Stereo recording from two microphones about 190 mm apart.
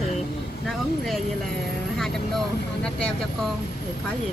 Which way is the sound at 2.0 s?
5° left (ahead or behind).